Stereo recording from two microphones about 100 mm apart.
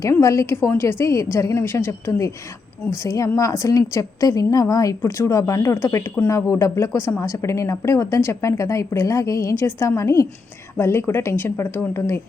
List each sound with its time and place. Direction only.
0.0 s a woman's voice: 30° left (ahead or behind)